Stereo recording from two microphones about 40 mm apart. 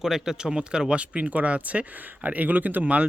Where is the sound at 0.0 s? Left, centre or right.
Centre.